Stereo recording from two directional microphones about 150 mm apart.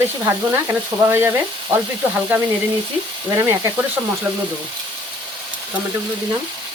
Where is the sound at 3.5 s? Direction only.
15° right (ahead or behind).